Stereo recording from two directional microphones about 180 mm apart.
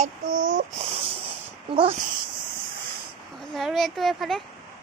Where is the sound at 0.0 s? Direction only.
45° right (ahead or behind).